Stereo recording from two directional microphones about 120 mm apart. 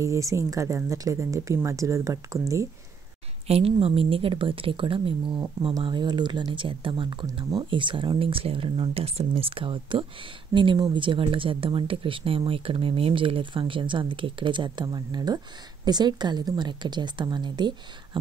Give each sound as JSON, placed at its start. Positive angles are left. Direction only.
{"t": 0.0, "sound": "speech", "side_deg": -25}
{"t": 3.4, "sound": "speech", "side_deg": -55}
{"t": 9.3, "sound": "speech", "side_deg": -45}